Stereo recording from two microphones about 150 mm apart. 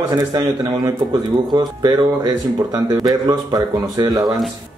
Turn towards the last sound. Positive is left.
turn(degrees=-25)  # may be behind; listen again after turning